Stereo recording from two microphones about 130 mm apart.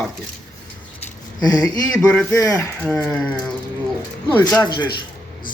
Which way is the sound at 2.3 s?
25° left (ahead or behind).